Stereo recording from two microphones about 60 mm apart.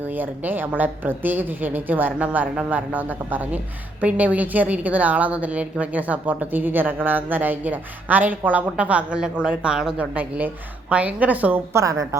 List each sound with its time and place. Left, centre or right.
0.0 s a woman's voice: right; by 9.9 s centre
10.0 s a woman's voice: right
11.7 s a woman's voice: right